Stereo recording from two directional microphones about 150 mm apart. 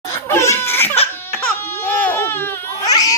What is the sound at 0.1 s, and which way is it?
Laughter, 20° left (ahead or behind).